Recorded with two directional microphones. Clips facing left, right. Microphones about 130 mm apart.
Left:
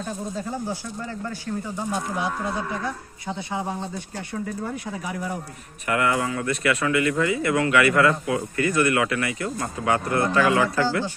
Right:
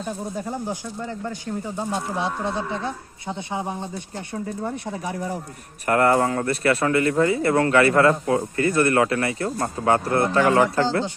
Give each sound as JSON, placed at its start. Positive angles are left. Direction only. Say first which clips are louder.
{"t": 0.0, "sound": "speech", "louder": "right 1 dB", "side_deg": -15}
{"t": 4.9, "sound": "speech", "louder": "right 2 dB", "side_deg": -30}
{"t": 5.8, "sound": "speech", "louder": "right 5 dB", "side_deg": -40}